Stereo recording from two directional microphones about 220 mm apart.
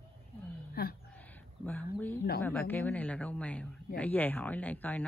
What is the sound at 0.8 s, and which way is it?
Speech, 45° left (ahead or behind).